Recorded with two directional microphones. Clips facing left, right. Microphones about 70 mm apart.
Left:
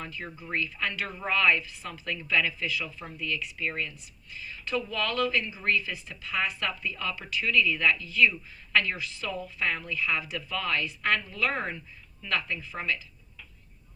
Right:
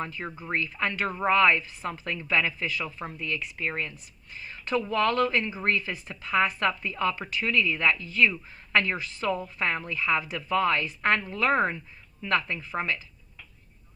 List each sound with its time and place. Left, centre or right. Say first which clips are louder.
0.0 s speech: right 5 dB; right